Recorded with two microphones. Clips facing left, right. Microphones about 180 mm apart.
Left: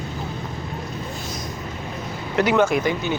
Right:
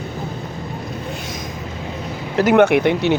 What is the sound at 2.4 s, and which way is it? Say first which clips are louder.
Speech: right 7 dB; 65° right (ahead or behind).